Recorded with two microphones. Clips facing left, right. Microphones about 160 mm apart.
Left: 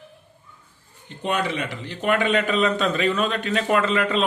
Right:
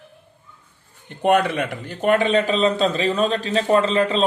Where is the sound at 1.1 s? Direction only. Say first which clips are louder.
Right 7 dB; 55° right (ahead or behind).